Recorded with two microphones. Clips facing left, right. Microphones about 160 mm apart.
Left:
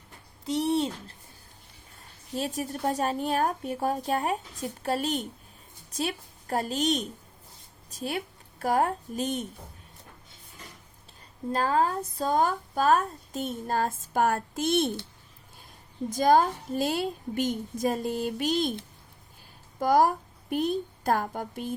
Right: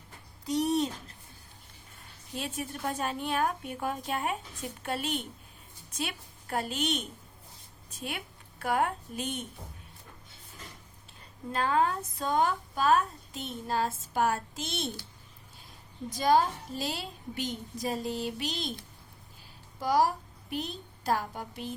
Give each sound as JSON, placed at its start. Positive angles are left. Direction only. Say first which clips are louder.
{"t": 0.4, "sound": "a sound", "louder": "left 2 dB", "side_deg": 25}
{"t": 2.3, "sound": "a woman's voice", "louder": "left 5 dB", "side_deg": 40}
{"t": 11.5, "sound": "a woman's voice", "louder": "left 2 dB", "side_deg": 35}
{"t": 16.0, "sound": "a woman's voice", "louder": "left 4 dB", "side_deg": 45}
{"t": 19.8, "sound": "a woman's voice", "louder": "left 4 dB", "side_deg": 50}